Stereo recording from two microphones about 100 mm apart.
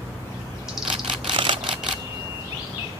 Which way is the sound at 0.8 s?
5° right (ahead or behind).